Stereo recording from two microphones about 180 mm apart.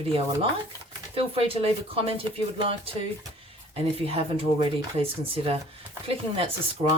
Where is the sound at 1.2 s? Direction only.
30° right (ahead or behind).